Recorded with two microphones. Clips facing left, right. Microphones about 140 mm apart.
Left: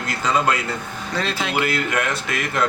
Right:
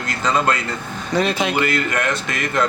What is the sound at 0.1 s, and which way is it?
Speech, 5° left (ahead or behind).